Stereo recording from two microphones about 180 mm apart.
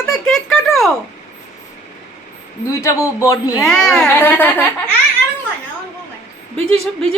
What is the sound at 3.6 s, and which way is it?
A child's voice, 5° left (ahead or behind).